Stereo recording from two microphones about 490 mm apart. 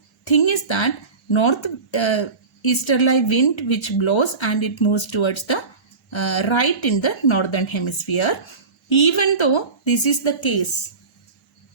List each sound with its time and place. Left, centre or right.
0.3 s speech: left